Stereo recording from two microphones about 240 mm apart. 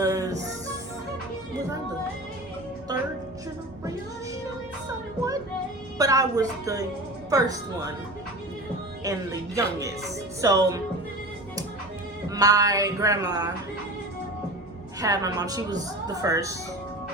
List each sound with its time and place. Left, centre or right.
0.0 s music: centre
4.9 s a sound: centre
6.0 s a woman's voice: centre
9.1 s a woman's voice: centre
10.4 s a woman's voice: centre
12.3 s a woman's voice: centre
15.0 s a woman's voice: centre